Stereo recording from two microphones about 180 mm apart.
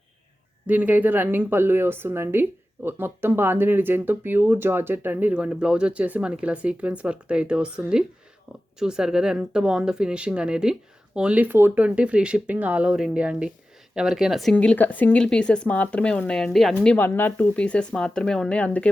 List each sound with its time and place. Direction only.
0.7 s a woman's voice: 10° right (ahead or behind); by 18.9 s 5° left (ahead or behind)